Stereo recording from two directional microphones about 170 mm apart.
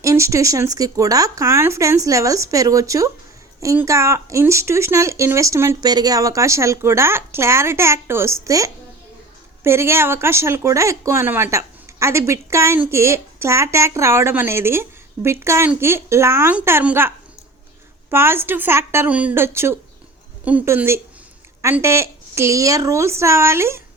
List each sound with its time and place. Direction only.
0.0 s speech: 15° right (ahead or behind)
18.1 s speech: 15° right (ahead or behind)